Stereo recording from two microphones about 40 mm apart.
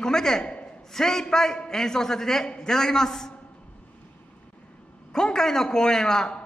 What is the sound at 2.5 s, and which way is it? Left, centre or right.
Speech, left.